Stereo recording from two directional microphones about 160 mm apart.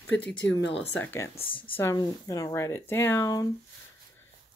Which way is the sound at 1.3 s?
35° left (ahead or behind).